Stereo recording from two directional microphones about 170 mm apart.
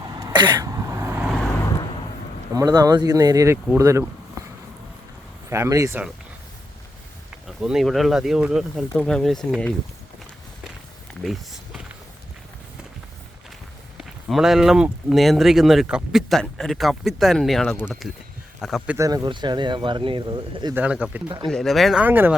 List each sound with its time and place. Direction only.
0.2 s throat clearing: 25° right (ahead or behind)
2.5 s speech: 20° right (ahead or behind)
5.5 s speech: 15° right (ahead or behind)
7.4 s speech: centre (ahead or behind)
11.1 s a sound: centre (ahead or behind)
14.0 s speech: centre (ahead or behind)
18.9 s speech: 20° right (ahead or behind)
20.7 s speech: 10° right (ahead or behind)